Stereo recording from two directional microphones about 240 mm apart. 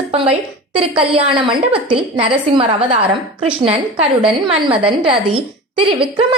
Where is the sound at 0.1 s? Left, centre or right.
Right.